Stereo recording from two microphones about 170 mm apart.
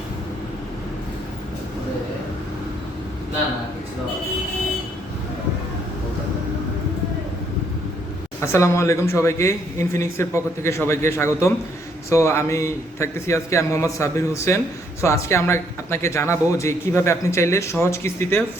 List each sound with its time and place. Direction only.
8.4 s speech: 15° left (ahead or behind)